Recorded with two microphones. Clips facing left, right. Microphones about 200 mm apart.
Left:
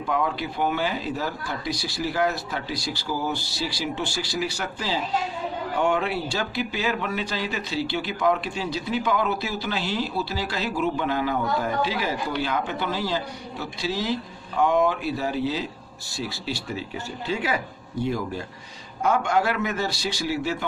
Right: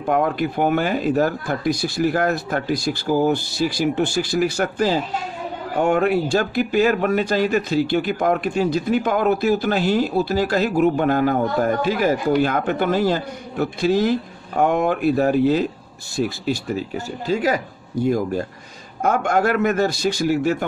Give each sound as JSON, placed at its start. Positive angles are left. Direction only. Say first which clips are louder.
{"t": 0.0, "sound": "a man's voice", "louder": "right 6 dB", "side_deg": -55}